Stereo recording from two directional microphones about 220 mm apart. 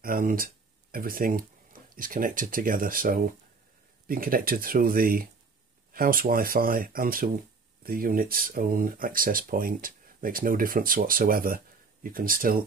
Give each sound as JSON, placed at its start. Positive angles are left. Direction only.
{"t": 0.0, "sound": "speech", "side_deg": -40}